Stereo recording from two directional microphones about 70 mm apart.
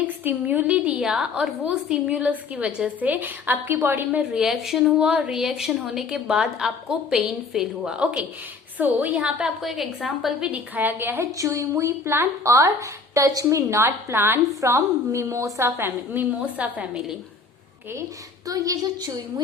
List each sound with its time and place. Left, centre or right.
0.3 s a woman's voice: right
0.9 s a woman's voice: centre; by 4.2 s right
4.2 s a woman's voice: centre
9.6 s a woman's voice: centre
10.8 s a woman's voice: right
11.3 s speech: right
16.6 s a woman's voice: centre
18.4 s a woman's voice: right